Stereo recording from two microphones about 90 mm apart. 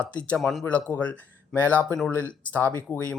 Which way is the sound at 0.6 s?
15° left (ahead or behind).